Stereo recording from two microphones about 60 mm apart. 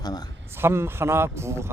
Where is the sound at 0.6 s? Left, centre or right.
Right.